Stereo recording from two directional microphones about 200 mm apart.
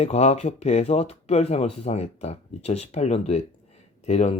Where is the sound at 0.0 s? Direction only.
35° left (ahead or behind).